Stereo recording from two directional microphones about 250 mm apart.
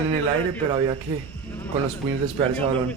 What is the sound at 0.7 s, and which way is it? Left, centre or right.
Speech, centre.